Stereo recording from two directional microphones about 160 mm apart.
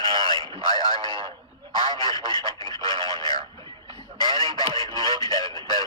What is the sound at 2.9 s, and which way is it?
Speech, 30° right (ahead or behind).